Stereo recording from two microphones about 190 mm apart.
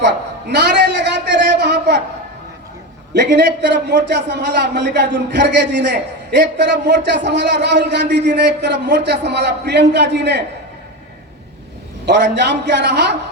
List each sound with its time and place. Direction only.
0.0 s a sound: 60° right (ahead or behind)
3.1 s a man's voice: 60° right (ahead or behind)
12.0 s a man's voice: 65° right (ahead or behind)